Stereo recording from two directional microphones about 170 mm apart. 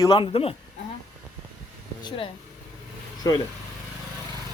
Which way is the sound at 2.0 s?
30° left (ahead or behind).